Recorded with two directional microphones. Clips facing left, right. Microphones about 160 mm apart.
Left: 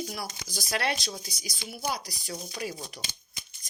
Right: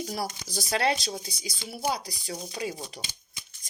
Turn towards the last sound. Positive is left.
turn(degrees=-30)  # may be behind; listen again after turning